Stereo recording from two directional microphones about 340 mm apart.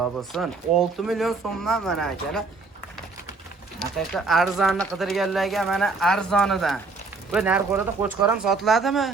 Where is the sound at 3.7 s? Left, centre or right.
Centre.